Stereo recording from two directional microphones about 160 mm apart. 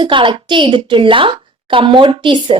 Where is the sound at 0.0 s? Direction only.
30° right (ahead or behind).